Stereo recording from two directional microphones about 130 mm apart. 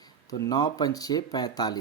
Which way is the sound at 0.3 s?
25° left (ahead or behind).